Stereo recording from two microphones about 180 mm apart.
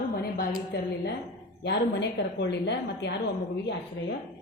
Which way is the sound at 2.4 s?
70° left (ahead or behind).